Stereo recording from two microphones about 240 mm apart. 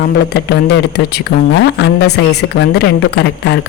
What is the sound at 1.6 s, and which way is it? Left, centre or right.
Speech, left.